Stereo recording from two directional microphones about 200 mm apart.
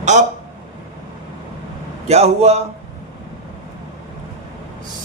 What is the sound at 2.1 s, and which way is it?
Speech, 30° right (ahead or behind).